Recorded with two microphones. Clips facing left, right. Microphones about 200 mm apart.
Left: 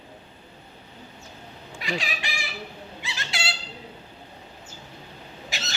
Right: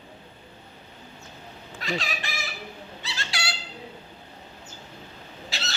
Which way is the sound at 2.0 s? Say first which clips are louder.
Even; 15° left (ahead or behind).